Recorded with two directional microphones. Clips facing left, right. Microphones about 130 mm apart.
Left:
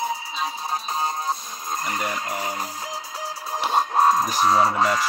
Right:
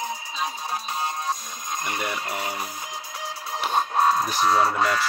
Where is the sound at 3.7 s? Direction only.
30° left (ahead or behind).